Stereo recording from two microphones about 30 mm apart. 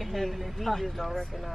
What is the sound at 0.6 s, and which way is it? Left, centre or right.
Speech, centre.